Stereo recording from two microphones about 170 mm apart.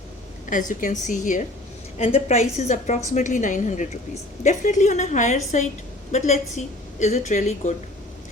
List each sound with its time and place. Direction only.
0.5 s a woman's voice: 50° left (ahead or behind)
2.0 s a woman's voice: 35° left (ahead or behind)